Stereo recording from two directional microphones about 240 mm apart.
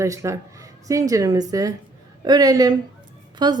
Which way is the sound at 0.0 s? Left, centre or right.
Centre.